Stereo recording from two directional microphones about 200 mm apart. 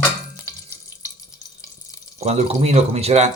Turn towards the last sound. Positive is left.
turn(degrees=-30)  # may be behind; listen again after turning